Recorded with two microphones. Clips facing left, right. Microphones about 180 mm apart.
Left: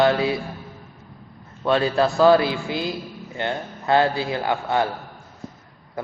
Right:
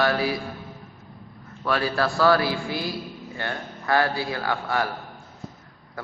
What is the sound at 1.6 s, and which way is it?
A man's voice, 25° left (ahead or behind).